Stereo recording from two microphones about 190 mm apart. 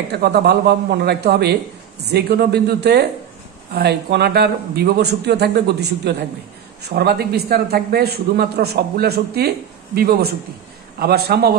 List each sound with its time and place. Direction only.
0.1 s a man's voice: 60° right (ahead or behind)